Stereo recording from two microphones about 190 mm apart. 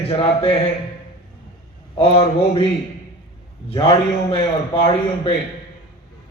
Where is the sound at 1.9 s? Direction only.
30° left (ahead or behind).